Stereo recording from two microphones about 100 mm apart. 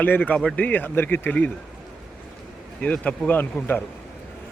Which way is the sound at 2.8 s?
15° left (ahead or behind).